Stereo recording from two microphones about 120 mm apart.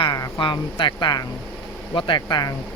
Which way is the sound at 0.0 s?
35° left (ahead or behind).